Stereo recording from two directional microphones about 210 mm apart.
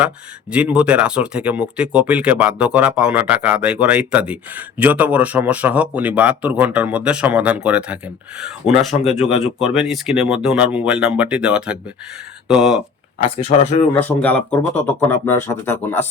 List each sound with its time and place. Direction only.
0.5 s speech: 5° right (ahead or behind)
13.4 s speech: 30° left (ahead or behind)
13.9 s speech: 5° left (ahead or behind)